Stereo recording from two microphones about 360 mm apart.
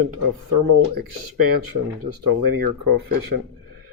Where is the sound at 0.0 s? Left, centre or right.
Right.